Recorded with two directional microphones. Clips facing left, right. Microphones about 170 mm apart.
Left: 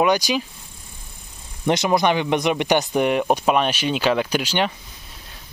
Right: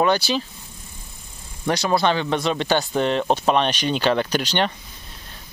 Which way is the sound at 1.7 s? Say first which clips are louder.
Left 2 dB; 20° left (ahead or behind).